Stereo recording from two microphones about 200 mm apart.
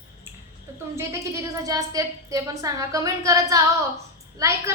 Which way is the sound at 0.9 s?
15° right (ahead or behind).